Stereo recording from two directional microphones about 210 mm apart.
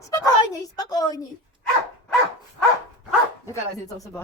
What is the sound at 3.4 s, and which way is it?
Speech, 15° left (ahead or behind).